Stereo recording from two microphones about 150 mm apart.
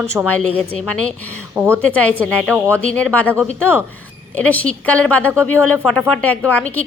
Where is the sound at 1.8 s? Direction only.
10° left (ahead or behind).